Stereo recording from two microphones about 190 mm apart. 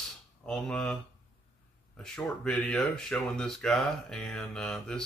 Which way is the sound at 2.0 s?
5° left (ahead or behind).